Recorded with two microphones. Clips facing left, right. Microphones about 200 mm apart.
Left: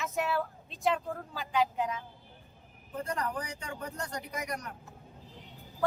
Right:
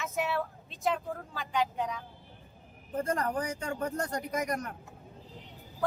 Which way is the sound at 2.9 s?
45° right (ahead or behind).